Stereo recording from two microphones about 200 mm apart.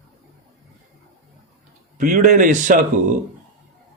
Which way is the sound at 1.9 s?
40° right (ahead or behind).